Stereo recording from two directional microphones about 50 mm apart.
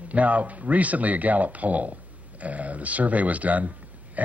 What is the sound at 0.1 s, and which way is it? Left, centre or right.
A man's voice, right.